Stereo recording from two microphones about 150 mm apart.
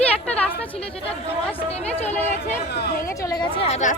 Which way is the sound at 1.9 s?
45° left (ahead or behind).